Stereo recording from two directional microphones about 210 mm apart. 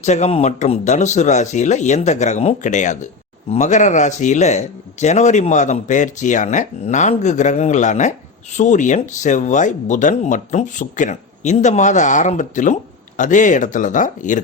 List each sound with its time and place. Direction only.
0.0 s speech: 35° left (ahead or behind)